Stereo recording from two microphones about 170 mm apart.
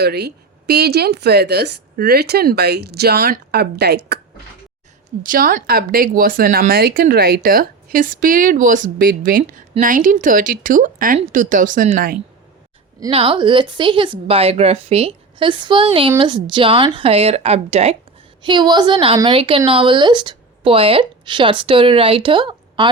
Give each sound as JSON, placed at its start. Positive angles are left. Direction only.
{"t": 0.0, "sound": "a woman's voice", "side_deg": -75}
{"t": 5.2, "sound": "a woman's voice", "side_deg": -55}
{"t": 13.0, "sound": "speech", "side_deg": -30}
{"t": 18.4, "sound": "a woman's voice", "side_deg": -25}